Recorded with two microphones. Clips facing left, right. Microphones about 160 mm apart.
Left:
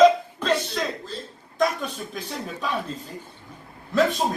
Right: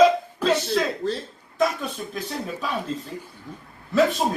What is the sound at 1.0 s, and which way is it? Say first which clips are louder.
Speech: right 9 dB; 80° right.